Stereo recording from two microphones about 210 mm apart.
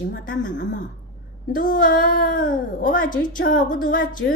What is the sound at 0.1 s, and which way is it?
Speech, 55° left (ahead or behind).